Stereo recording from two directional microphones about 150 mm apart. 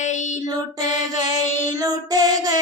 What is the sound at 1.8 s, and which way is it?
Child singing, 25° right (ahead or behind).